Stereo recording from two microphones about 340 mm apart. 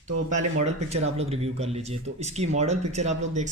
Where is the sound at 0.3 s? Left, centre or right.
Centre.